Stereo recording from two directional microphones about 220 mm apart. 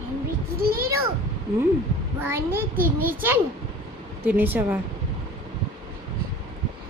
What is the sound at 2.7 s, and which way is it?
Speech, 40° right (ahead or behind).